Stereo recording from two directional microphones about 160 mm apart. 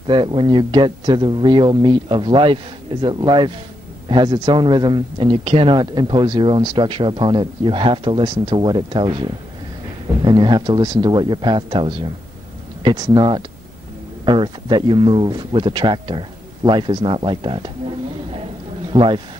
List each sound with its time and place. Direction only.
0.0 s speech: 30° right (ahead or behind)
18.9 s speech: 30° right (ahead or behind)